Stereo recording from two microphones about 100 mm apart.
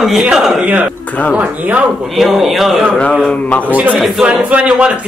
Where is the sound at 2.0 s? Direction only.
Centre (ahead or behind).